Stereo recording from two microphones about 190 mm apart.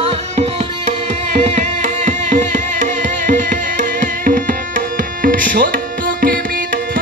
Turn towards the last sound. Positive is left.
turn(degrees=-50)  # may be behind; listen again after turning